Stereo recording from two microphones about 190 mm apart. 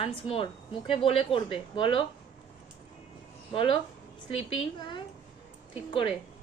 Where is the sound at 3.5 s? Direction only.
30° left (ahead or behind).